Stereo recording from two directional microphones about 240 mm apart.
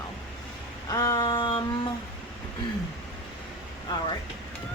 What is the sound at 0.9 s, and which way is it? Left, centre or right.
Speech, centre.